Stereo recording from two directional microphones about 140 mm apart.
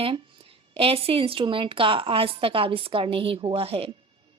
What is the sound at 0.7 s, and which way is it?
A woman's voice, 45° right (ahead or behind).